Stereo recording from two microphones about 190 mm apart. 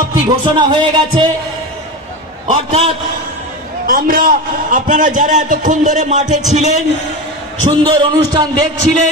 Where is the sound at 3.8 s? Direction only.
50° right (ahead or behind).